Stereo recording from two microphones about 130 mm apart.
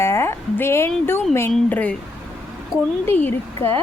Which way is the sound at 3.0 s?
15° left (ahead or behind).